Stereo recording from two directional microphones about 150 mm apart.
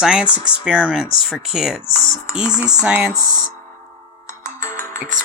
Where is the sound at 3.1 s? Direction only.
60° right (ahead or behind).